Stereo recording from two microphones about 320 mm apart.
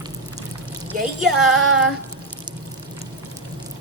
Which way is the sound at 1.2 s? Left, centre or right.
Centre.